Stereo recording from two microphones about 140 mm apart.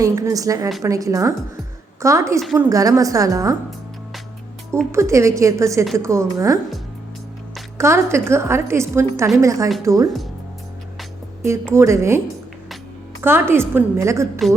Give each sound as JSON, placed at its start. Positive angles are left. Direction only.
{"t": 0.0, "sound": "a woman's voice", "side_deg": -25}
{"t": 4.9, "sound": "a woman's voice", "side_deg": -20}
{"t": 7.8, "sound": "a woman's voice", "side_deg": -20}
{"t": 11.7, "sound": "a woman's voice", "side_deg": -20}
{"t": 13.2, "sound": "a woman's voice", "side_deg": -15}